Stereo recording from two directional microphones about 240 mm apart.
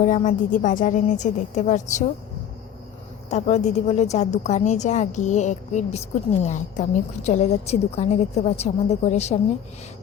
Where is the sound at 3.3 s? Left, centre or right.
Left.